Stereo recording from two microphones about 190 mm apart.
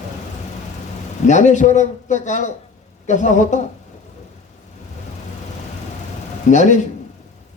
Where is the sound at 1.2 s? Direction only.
40° left (ahead or behind).